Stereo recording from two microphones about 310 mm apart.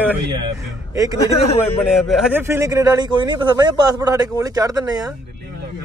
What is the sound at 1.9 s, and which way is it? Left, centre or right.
Speech, centre.